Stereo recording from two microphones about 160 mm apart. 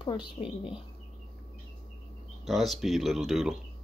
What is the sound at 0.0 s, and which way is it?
Speech, 30° left (ahead or behind).